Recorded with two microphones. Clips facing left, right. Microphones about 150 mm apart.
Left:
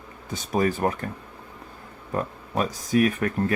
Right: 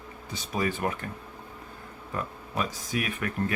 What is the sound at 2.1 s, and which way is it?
Speech, 40° left (ahead or behind).